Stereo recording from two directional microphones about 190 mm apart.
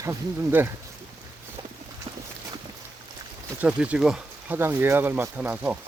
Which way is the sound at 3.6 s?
5° right (ahead or behind).